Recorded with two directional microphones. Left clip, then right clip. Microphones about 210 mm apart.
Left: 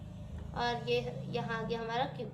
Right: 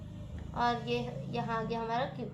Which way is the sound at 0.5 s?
20° left (ahead or behind).